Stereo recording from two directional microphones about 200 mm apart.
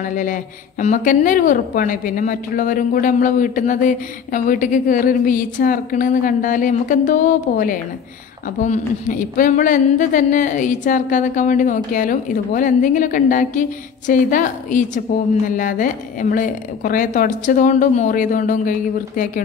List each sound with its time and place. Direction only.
0.0 s a woman's voice: 40° left (ahead or behind)